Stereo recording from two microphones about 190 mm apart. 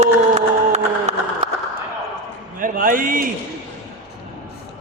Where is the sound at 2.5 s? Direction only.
45° right (ahead or behind).